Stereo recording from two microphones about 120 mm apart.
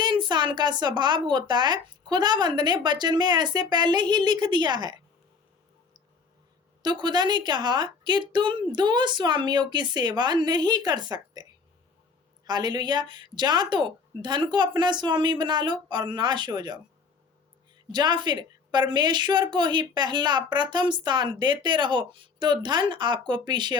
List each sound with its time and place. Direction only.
0.0 s a woman's voice: 40° right (ahead or behind)
6.8 s a woman's voice: 35° right (ahead or behind)
12.5 s a woman's voice: 35° right (ahead or behind)
17.9 s a woman's voice: 35° right (ahead or behind)